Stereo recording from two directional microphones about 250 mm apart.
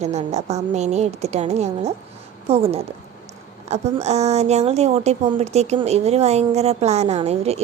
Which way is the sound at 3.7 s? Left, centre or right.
Right.